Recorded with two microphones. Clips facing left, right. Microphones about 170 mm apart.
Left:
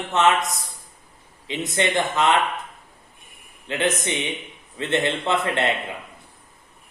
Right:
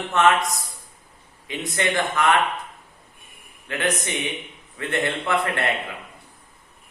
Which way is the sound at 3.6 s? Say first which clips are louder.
Left 2 dB; 20° left (ahead or behind).